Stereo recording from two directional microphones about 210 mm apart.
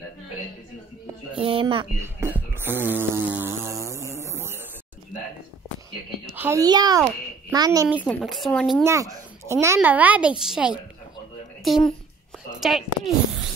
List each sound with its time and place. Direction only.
1.3 s speech: 25° right (ahead or behind)
2.0 s a sound: 10° right (ahead or behind)
6.3 s a child's voice: 10° right (ahead or behind)
8.0 s speech: 5° left (ahead or behind)
8.8 s a child's voice: 15° right (ahead or behind)